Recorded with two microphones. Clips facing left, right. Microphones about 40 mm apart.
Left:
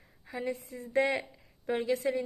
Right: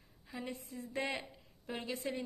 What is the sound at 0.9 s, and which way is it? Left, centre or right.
Speech, left.